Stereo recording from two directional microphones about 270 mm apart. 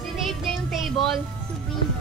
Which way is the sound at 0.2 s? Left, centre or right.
Centre.